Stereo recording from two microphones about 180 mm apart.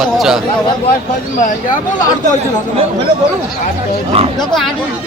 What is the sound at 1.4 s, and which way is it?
Speech, 45° left (ahead or behind).